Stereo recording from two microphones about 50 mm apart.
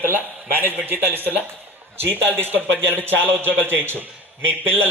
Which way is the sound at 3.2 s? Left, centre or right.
Right.